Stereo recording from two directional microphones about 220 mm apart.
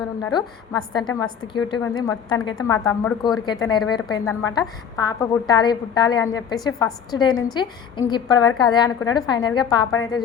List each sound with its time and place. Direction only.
0.2 s a woman's voice: 15° left (ahead or behind)